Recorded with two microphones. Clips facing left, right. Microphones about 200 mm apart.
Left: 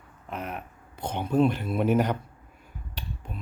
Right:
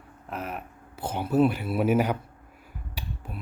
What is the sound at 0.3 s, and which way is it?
Speech, centre (ahead or behind).